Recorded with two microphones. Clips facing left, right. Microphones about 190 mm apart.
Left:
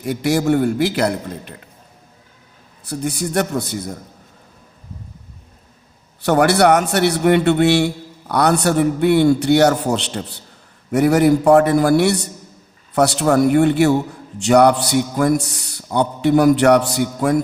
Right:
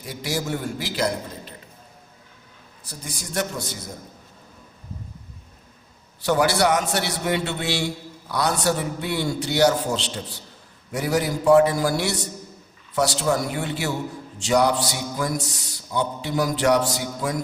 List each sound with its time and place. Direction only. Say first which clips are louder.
0.0 s a man's voice: left 10 dB; 60° left (ahead or behind)
2.8 s a man's voice: left 14 dB; 65° left (ahead or behind)
6.2 s a man's voice: left 6 dB; 60° left (ahead or behind)